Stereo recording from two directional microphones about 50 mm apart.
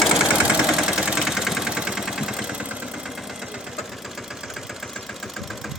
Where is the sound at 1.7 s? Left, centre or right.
Centre.